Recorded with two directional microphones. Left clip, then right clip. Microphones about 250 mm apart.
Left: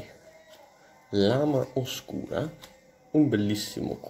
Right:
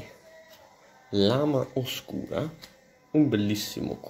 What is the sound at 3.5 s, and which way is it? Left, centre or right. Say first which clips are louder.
Speech: even; left.